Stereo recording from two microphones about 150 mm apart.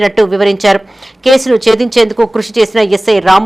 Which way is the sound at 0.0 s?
Centre (ahead or behind).